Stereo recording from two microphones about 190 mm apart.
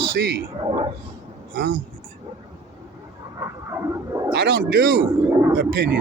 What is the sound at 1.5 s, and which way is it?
Speech, 50° right (ahead or behind).